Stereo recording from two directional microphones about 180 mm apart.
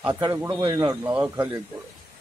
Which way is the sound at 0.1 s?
25° right (ahead or behind).